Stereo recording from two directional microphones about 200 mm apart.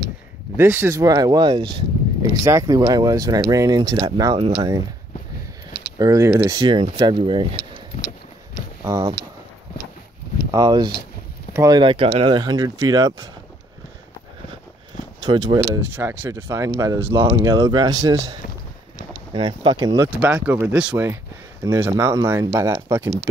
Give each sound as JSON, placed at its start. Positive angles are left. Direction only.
{"t": 0.6, "sound": "speech", "side_deg": -10}
{"t": 5.9, "sound": "speech", "side_deg": -15}
{"t": 8.8, "sound": "speech", "side_deg": -15}
{"t": 10.5, "sound": "speech", "side_deg": -20}
{"t": 15.1, "sound": "speech", "side_deg": -20}
{"t": 20.1, "sound": "speech", "side_deg": -5}